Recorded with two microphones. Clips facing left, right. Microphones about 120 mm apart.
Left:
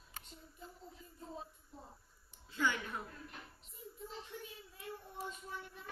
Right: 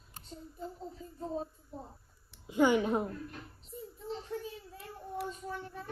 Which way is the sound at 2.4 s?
15° right (ahead or behind).